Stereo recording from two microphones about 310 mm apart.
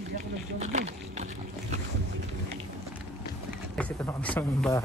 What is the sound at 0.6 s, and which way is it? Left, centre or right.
Speech, right.